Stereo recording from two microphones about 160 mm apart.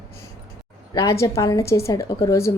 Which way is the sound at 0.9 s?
20° left (ahead or behind).